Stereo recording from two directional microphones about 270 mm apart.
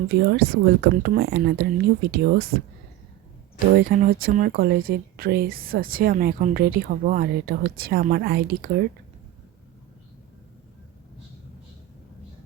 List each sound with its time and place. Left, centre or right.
0.1 s speech: right
3.8 s speech: right